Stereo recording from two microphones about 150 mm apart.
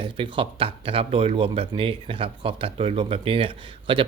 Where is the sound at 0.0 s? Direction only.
35° right (ahead or behind).